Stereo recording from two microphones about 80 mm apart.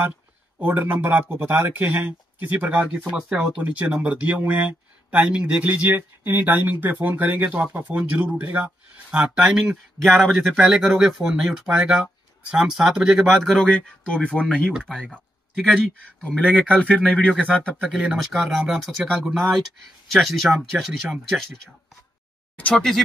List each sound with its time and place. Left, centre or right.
0.6 s speech: right
3.1 s speech: centre; by 8.6 s right
8.6 s speech: centre
10.1 s speech: centre
13.4 s speech: centre
15.6 s speech: centre
16.8 s speech: centre
17.1 s speech: centre
17.7 s speech: centre
18.3 s speech: centre
22.6 s speech: centre